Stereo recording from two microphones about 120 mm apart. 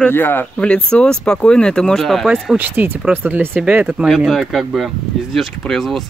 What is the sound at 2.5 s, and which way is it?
Speech, 15° right (ahead or behind).